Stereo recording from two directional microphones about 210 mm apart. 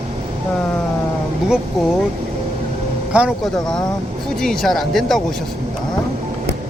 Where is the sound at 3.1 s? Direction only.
Centre (ahead or behind).